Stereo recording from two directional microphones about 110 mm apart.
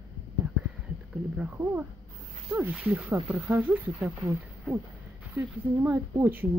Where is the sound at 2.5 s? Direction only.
15° right (ahead or behind).